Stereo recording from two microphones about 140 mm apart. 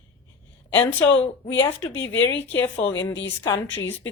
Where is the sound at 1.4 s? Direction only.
15° left (ahead or behind).